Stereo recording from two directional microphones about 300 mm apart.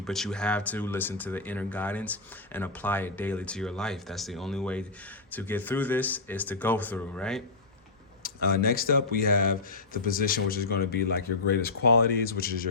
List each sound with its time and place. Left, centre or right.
0.0 s speech: centre
8.2 s speech: left